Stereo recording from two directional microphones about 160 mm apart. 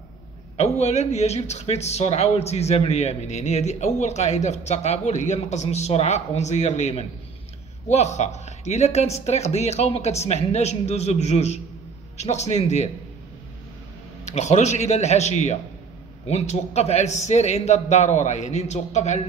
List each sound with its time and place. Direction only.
0.6 s speech: 45° left (ahead or behind)
14.2 s speech: 45° left (ahead or behind)